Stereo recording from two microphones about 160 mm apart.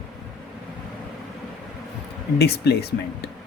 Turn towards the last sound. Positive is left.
turn(degrees=90)